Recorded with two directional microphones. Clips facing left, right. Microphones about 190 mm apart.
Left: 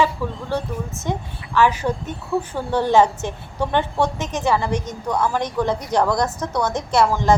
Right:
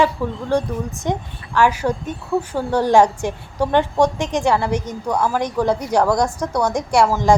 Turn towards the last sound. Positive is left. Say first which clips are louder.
# right 2 dB
turn(degrees=-10)  # may be behind; listen again after turning